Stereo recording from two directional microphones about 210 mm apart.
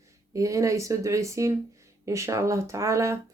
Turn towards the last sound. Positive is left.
turn(degrees=-15)  # may be behind; listen again after turning